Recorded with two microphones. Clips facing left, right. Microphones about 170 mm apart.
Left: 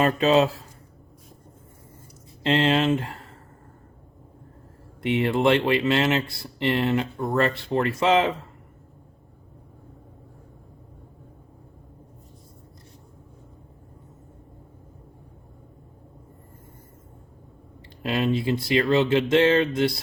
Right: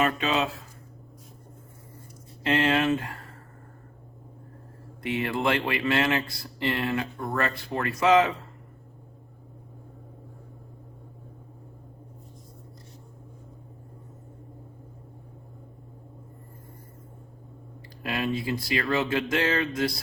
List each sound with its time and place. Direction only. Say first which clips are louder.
0.0 s speech: left 6 dB; 35° left (ahead or behind)
2.4 s speech: left 3 dB; 25° left (ahead or behind)
5.0 s speech: left 6 dB; 25° left (ahead or behind)
18.0 s speech: left 5 dB; 25° left (ahead or behind)